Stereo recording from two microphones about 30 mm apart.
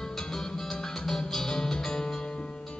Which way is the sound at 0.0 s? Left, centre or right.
Centre.